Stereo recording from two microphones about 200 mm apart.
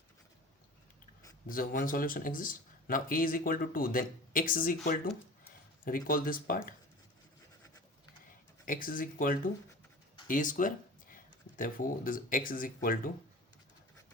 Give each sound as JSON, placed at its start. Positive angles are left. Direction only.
{"t": 1.5, "sound": "speech", "side_deg": 45}
{"t": 8.6, "sound": "speech", "side_deg": 45}